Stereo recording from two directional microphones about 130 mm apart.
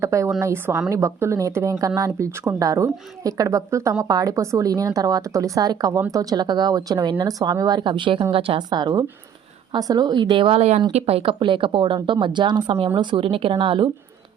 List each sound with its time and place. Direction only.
0.0 s a woman's voice: 25° right (ahead or behind); by 13.9 s 40° right (ahead or behind)